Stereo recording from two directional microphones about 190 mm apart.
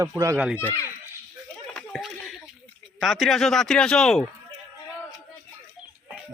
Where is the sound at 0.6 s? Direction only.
15° left (ahead or behind).